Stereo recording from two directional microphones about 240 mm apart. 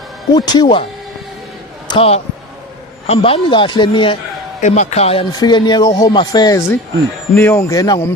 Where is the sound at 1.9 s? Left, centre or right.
Left.